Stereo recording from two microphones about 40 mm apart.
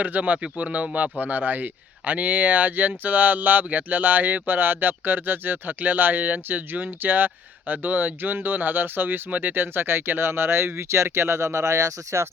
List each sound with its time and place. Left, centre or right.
0.0 s speech: right
0.4 s speech: right
1.2 s speech: right